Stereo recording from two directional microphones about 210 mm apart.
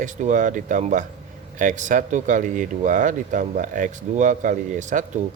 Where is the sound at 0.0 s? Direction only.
35° right (ahead or behind).